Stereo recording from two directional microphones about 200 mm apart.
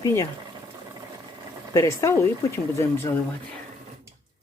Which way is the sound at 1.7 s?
15° left (ahead or behind).